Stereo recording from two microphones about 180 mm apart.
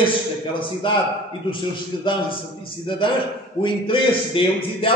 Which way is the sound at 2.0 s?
30° left (ahead or behind).